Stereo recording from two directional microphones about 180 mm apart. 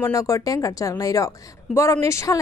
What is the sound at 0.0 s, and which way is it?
A woman's voice, 15° left (ahead or behind).